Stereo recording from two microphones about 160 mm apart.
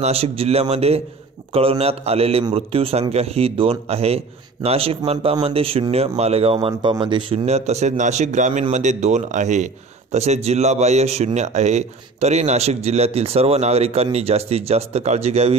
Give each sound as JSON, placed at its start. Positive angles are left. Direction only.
{"t": 0.0, "sound": "speech", "side_deg": -40}